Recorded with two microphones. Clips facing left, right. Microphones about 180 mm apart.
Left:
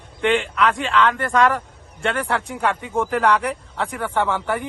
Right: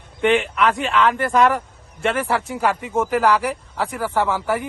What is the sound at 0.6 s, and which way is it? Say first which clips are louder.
Speech: right 1 dB; centre (ahead or behind).